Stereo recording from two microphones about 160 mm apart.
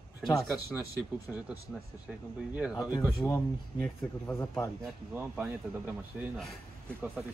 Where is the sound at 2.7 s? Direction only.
20° left (ahead or behind).